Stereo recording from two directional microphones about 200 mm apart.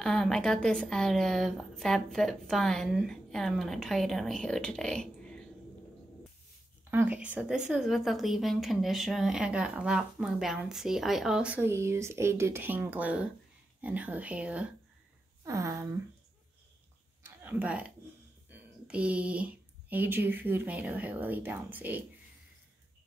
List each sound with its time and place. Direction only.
0.0 s a woman's voice: 5° left (ahead or behind)
6.9 s a woman's voice: 10° right (ahead or behind)
17.2 s a sound: 10° right (ahead or behind)
18.5 s speech: 5° right (ahead or behind)